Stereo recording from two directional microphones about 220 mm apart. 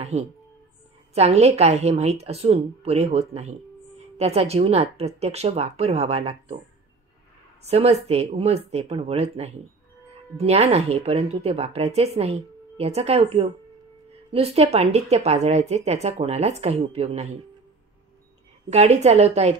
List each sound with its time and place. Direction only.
0.0 s music: 30° right (ahead or behind)
1.1 s speech: 30° right (ahead or behind)
7.6 s speech: 30° right (ahead or behind)
18.7 s speech: 30° right (ahead or behind)